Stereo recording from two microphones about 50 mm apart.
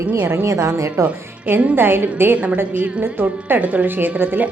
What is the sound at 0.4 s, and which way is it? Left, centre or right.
Speech, right.